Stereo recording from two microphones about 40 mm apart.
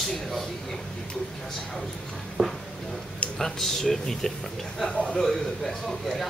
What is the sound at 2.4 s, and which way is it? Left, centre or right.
Speech, right.